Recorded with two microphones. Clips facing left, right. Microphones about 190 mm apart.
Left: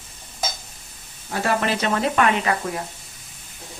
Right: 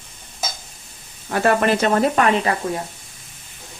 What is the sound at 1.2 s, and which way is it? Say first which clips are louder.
Speech: right 5 dB; 60° right (ahead or behind).